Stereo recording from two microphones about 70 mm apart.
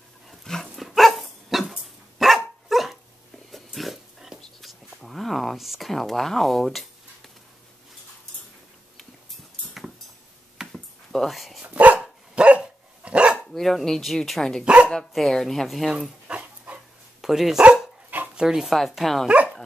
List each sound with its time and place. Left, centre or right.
0.3 s dog: centre
4.4 s a sound: centre
8.9 s a sound: centre
11.6 s dog: right
13.4 s speech: centre
14.6 s speech: centre
15.1 s speech: centre
15.9 s speech: centre
19.2 s speech: right